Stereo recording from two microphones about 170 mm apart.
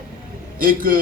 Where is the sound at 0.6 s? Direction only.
55° right (ahead or behind).